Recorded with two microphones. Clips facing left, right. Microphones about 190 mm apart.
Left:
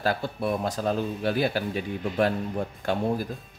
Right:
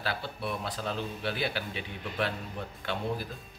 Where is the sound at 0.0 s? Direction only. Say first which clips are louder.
Left 8 dB; 45° left (ahead or behind).